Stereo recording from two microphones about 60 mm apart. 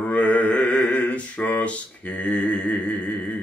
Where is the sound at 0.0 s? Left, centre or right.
Left.